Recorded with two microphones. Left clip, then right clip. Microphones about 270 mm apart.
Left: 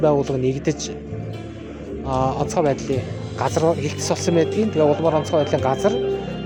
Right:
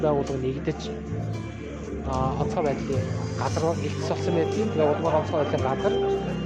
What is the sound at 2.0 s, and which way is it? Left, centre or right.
Speech, left.